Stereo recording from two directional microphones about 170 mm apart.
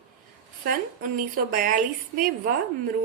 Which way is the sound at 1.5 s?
55° right (ahead or behind).